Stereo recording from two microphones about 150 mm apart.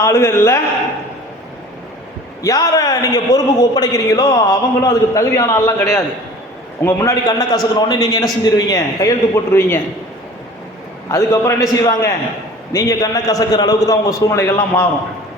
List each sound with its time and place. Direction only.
0.0 s a man's voice: 20° left (ahead or behind)
2.4 s a man's voice: 25° left (ahead or behind)
11.1 s a man's voice: 20° left (ahead or behind)